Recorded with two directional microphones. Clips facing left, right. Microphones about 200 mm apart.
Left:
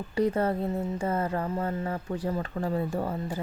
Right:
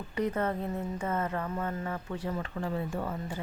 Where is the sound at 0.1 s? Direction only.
30° left (ahead or behind).